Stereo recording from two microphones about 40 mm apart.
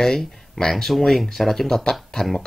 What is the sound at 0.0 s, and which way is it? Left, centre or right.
Speech, centre.